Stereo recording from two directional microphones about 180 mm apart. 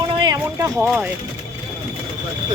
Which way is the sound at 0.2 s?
20° right (ahead or behind).